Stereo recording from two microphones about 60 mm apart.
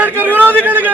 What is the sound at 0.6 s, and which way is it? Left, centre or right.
Speech, right.